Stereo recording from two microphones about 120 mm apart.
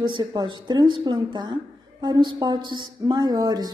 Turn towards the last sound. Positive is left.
turn(degrees=-35)  # may be behind; listen again after turning